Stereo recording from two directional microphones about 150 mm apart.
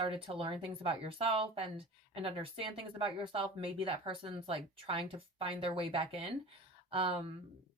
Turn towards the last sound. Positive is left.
turn(degrees=-40)  # may be behind; listen again after turning